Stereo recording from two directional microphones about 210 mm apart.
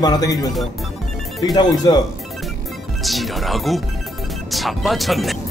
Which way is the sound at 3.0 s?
Centre (ahead or behind).